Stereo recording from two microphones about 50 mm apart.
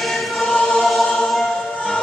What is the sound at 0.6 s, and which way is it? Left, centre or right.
Choir, left.